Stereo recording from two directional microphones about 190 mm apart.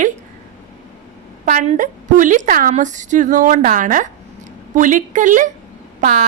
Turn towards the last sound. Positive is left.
turn(degrees=-50)  # may be behind; listen again after turning